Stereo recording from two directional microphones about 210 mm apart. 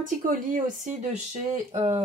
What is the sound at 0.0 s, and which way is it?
Speech, 40° right (ahead or behind).